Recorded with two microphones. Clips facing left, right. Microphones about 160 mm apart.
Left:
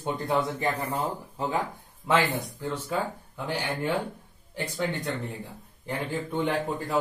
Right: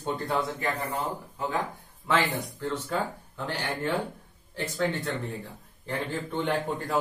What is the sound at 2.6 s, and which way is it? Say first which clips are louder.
Speech: even; 10° left (ahead or behind).